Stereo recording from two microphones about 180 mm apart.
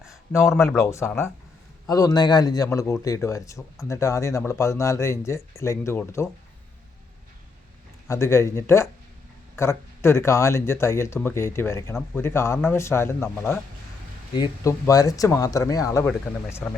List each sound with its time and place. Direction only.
0.8 s a man's voice: 15° left (ahead or behind)
8.0 s speech: 15° left (ahead or behind)